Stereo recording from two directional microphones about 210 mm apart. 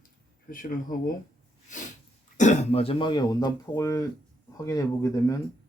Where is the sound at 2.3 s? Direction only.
35° left (ahead or behind); by 5.3 s 15° left (ahead or behind).